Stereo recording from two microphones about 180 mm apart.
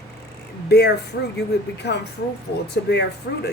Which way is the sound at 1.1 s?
60° left (ahead or behind).